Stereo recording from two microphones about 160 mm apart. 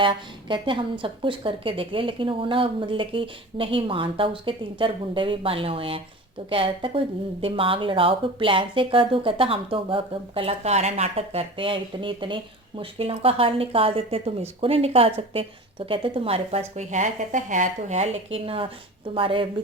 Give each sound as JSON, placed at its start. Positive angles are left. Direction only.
{"t": 0.0, "sound": "speech", "side_deg": -30}